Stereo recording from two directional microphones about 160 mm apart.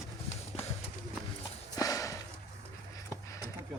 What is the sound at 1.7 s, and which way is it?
Horse, 20° left (ahead or behind).